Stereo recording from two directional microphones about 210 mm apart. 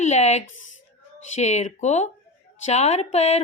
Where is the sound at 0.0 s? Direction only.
30° left (ahead or behind).